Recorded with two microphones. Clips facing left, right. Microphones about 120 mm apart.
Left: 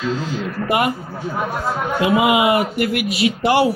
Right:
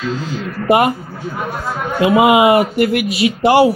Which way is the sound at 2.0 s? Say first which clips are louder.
Right 6 dB; 25° right (ahead or behind).